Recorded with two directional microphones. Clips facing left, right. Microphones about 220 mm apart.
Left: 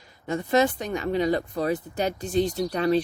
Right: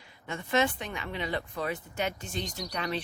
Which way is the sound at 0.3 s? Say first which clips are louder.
Left 6 dB; 40° left (ahead or behind).